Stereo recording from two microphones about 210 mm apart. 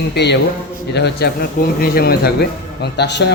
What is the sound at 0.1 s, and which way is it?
Speech, 55° left (ahead or behind).